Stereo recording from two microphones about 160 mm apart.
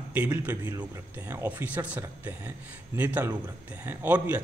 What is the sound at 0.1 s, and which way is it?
Speech, 10° right (ahead or behind).